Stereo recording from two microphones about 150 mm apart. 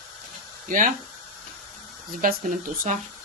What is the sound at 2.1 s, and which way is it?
Speech, 70° right (ahead or behind).